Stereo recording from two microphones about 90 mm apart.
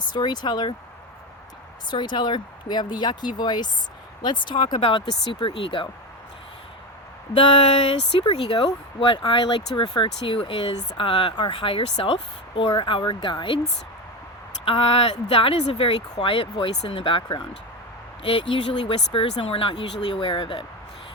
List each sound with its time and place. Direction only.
0.0 s speech: 55° left (ahead or behind)
1.9 s speech: 60° left (ahead or behind)
7.9 s speech: 90° left; by 10.1 s 65° left (ahead or behind)
10.2 s speech: 75° left (ahead or behind)
11.3 s speech: 70° left (ahead or behind)
14.6 s speech: 90° left; by 20.7 s 70° left (ahead or behind)